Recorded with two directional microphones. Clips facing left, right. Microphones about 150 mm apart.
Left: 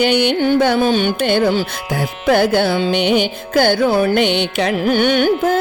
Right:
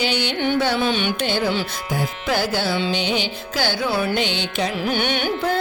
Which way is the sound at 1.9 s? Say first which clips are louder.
Left 8 dB; 65° left (ahead or behind).